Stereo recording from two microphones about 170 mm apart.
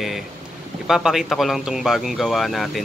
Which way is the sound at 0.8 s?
Centre (ahead or behind).